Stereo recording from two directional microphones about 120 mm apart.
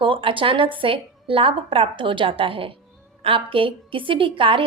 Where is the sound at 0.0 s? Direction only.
45° right (ahead or behind).